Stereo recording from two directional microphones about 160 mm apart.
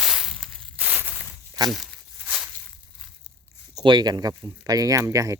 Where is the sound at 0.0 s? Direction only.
Centre (ahead or behind).